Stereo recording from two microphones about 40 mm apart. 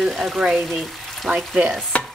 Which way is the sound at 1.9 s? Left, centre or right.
Left.